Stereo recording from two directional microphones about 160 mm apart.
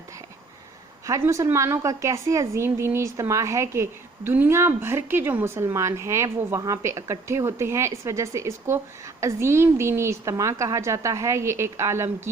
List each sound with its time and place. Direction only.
1.0 s a woman's voice: 20° right (ahead or behind)